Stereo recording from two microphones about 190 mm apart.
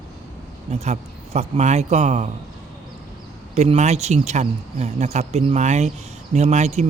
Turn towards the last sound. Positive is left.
turn(degrees=-35)  # may be behind; listen again after turning